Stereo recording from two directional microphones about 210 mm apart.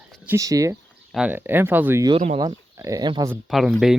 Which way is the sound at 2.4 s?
15° right (ahead or behind).